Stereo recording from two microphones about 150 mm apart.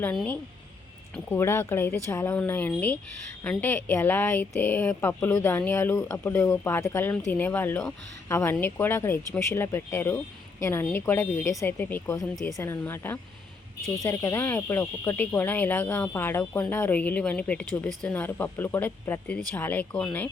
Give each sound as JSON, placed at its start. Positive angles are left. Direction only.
{"t": 0.0, "sound": "speech", "side_deg": 10}